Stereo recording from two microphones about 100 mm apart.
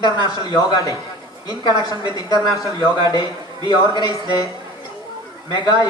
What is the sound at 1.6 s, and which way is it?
Speech, 45° left (ahead or behind).